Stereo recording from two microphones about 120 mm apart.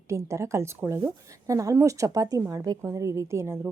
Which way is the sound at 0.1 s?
25° right (ahead or behind).